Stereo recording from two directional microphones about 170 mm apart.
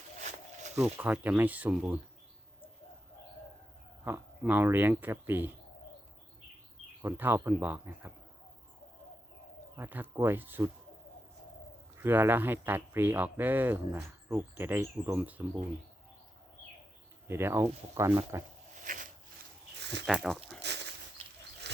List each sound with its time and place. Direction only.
0.8 s speech: 10° right (ahead or behind)
4.0 s speech: 10° right (ahead or behind)
7.0 s speech: 10° right (ahead or behind)
9.7 s speech: 10° right (ahead or behind)
11.9 s speech: 15° right (ahead or behind)
17.2 s speech: 15° right (ahead or behind)
18.9 s a sound: 50° right (ahead or behind)
19.8 s a sound: 90° right
20.1 s speech: centre (ahead or behind)
20.6 s a sound: 90° right